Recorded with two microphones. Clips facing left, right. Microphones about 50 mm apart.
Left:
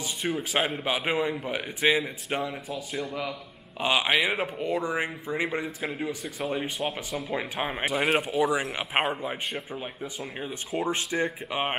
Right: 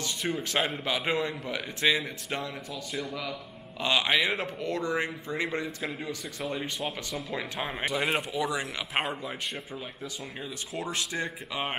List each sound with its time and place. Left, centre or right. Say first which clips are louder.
0.0 s a man's voice: left 2 dB; centre
3.8 s a man's voice: left 2 dB; centre
10.7 s speech: left 5 dB; left